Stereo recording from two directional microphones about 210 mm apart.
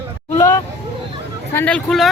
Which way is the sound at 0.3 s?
15° left (ahead or behind).